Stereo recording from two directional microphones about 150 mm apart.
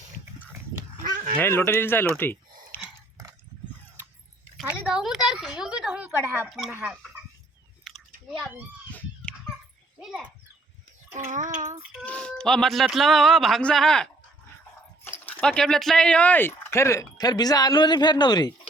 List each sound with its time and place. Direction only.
1.0 s a sound: 60° right (ahead or behind)
1.4 s speech: 15° left (ahead or behind)
2.7 s a sound: 15° left (ahead or behind)
4.5 s speech: 5° right (ahead or behind)
6.5 s speech: centre (ahead or behind)
7.9 s chewing: centre (ahead or behind)
8.9 s a sound: 10° left (ahead or behind)
10.0 s speech: centre (ahead or behind)
11.1 s child singing: 55° right (ahead or behind)
12.0 s speech: 5° left (ahead or behind)
15.3 s speech: 5° left (ahead or behind); by 18.5 s 30° left (ahead or behind)